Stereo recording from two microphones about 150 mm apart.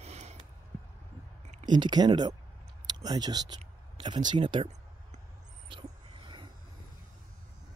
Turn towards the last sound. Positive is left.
turn(degrees=-35)  # may be behind; listen again after turning